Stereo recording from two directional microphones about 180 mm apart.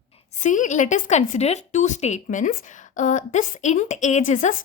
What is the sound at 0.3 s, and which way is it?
A woman's voice, 40° left (ahead or behind).